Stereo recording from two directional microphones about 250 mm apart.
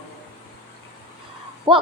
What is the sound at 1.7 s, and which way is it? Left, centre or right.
Speech, centre.